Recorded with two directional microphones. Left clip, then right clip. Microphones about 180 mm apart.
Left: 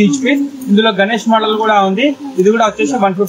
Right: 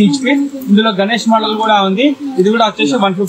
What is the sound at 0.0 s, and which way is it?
A man's voice, 5° left (ahead or behind).